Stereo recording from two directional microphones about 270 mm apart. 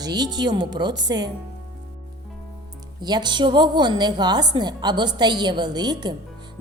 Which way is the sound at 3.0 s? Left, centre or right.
Centre.